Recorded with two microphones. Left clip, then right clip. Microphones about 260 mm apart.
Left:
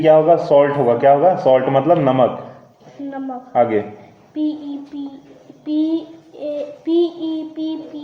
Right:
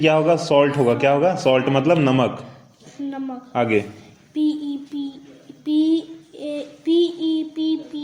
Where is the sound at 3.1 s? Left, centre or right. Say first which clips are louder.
Left 4 dB; right.